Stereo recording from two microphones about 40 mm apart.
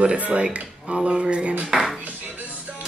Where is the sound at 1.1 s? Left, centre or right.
Right.